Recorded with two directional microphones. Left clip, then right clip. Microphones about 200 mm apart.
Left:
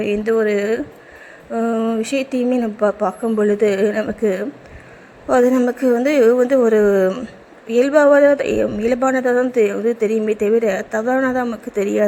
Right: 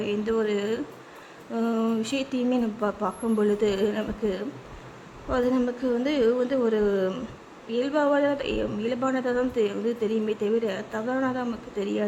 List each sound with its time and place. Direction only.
0.0 s speech: 15° left (ahead or behind)